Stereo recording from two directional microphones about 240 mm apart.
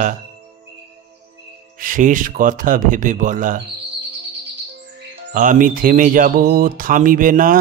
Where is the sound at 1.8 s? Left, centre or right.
Right.